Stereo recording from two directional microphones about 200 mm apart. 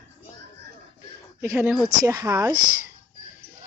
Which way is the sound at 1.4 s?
10° right (ahead or behind).